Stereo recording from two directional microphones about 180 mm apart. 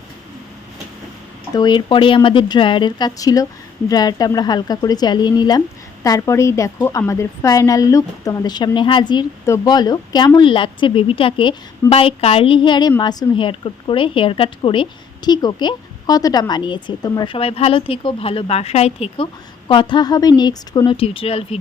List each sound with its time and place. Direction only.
1.5 s a woman's voice: 25° left (ahead or behind)